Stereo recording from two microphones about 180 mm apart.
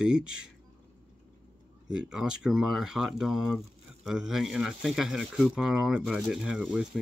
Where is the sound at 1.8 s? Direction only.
5° right (ahead or behind).